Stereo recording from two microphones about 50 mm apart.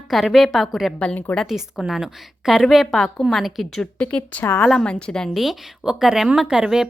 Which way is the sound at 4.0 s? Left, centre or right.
Left.